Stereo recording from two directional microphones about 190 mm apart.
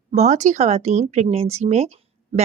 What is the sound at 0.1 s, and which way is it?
A woman's voice, 35° right (ahead or behind).